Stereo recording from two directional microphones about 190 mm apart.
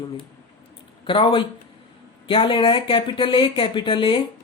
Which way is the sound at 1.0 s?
25° left (ahead or behind).